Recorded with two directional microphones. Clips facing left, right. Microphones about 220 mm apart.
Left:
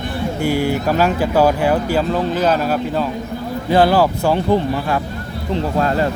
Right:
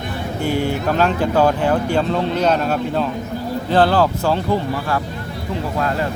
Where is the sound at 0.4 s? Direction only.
10° left (ahead or behind).